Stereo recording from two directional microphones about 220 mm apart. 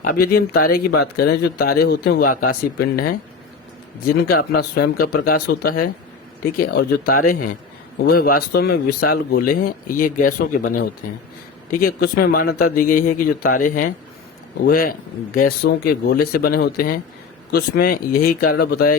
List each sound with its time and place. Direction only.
0.0 s speech: 40° left (ahead or behind)
11.9 s speech: 45° left (ahead or behind)